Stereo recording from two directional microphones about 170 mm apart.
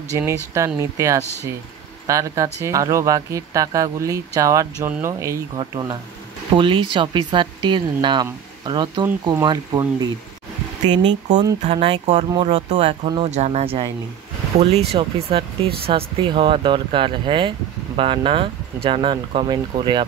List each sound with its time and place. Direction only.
0.1 s speech: 15° right (ahead or behind)
1.2 s speech: 15° left (ahead or behind)
2.0 s speech: 20° right (ahead or behind)